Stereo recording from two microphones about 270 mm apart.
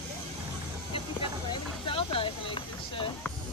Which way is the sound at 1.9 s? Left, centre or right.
Centre.